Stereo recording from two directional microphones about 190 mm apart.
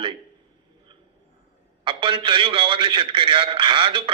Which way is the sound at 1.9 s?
25° right (ahead or behind).